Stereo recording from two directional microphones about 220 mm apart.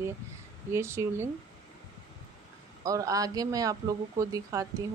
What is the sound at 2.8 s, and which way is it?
Speech, 15° right (ahead or behind).